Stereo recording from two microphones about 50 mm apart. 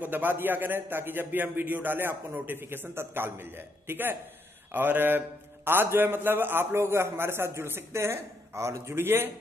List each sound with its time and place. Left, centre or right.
0.0 s a man's voice: right